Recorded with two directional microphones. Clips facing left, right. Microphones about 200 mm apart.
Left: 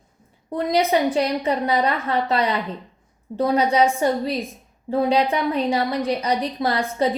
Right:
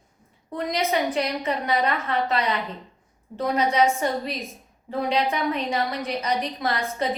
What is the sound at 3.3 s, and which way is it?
Speech, 30° left (ahead or behind).